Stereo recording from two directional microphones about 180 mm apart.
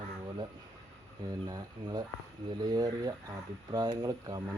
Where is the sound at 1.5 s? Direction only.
20° right (ahead or behind).